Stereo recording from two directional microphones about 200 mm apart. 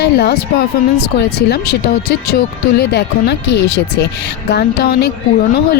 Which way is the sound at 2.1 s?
55° left (ahead or behind).